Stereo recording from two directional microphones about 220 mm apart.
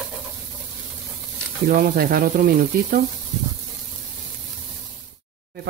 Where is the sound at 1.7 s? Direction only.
40° right (ahead or behind).